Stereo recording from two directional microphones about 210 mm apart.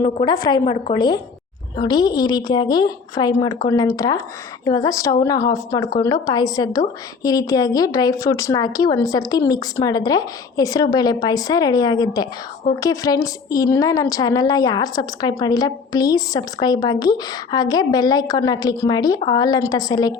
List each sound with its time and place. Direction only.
0.0 s a woman's voice: 20° left (ahead or behind)